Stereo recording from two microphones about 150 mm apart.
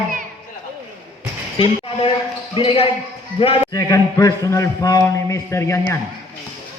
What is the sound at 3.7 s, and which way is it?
A man's voice, 20° left (ahead or behind).